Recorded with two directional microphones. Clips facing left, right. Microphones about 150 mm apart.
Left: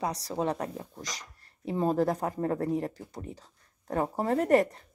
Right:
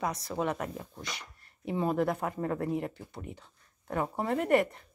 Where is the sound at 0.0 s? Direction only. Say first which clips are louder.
Left 1 dB; 35° left (ahead or behind).